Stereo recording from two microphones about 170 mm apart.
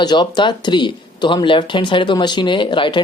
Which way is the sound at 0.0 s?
25° left (ahead or behind).